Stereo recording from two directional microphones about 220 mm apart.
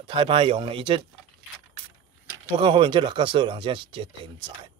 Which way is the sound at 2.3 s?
20° right (ahead or behind).